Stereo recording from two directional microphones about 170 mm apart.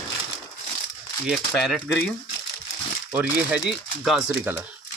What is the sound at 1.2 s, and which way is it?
Speech, centre (ahead or behind).